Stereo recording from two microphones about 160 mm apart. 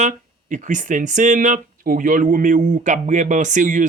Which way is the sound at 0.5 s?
55° right (ahead or behind).